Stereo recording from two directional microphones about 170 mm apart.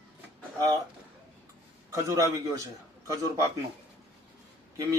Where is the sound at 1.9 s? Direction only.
20° right (ahead or behind).